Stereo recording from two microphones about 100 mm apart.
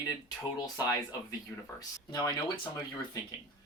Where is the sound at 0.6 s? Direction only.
40° left (ahead or behind).